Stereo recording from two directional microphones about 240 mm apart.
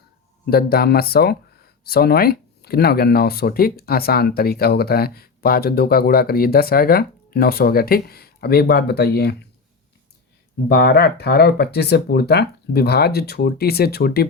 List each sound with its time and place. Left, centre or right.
0.5 s speech: left
10.7 s speech: left